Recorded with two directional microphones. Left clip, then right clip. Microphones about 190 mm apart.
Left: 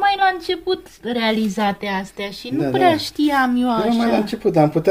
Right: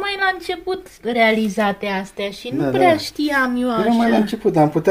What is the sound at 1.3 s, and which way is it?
A woman's voice, 50° left (ahead or behind).